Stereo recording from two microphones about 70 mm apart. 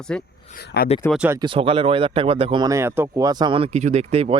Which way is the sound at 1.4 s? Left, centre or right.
Right.